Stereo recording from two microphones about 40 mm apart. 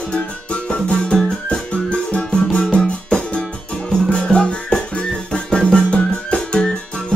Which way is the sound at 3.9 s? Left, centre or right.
Left.